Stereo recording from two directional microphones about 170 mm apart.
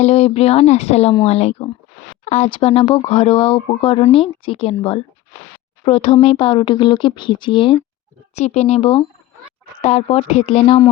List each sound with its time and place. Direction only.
0.0 s speech: 40° left (ahead or behind)
8.4 s speech: 40° left (ahead or behind)